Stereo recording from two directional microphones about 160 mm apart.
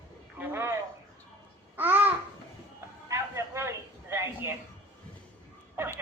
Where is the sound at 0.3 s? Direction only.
15° right (ahead or behind).